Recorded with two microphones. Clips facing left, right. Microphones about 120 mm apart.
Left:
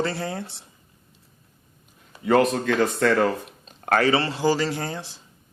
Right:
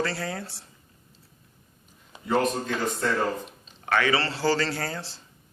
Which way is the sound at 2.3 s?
85° left.